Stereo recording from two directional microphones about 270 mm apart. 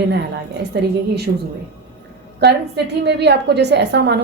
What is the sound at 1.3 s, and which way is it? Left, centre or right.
Speech, right.